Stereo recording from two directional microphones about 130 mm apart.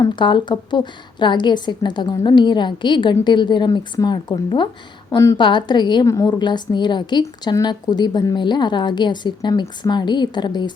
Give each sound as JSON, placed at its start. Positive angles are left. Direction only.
{"t": 0.2, "sound": "a woman's voice", "side_deg": 35}
{"t": 5.1, "sound": "a woman's voice", "side_deg": 25}
{"t": 5.4, "sound": "a woman's voice", "side_deg": 35}
{"t": 6.1, "sound": "a woman's voice", "side_deg": 25}
{"t": 6.4, "sound": "a woman's voice", "side_deg": 35}